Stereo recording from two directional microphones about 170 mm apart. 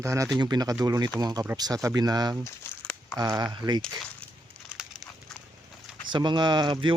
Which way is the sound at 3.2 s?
25° right (ahead or behind).